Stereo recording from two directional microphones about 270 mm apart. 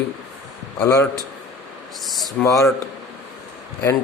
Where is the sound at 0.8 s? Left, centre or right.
Centre.